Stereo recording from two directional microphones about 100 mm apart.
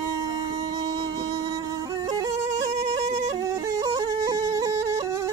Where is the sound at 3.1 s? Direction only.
35° right (ahead or behind).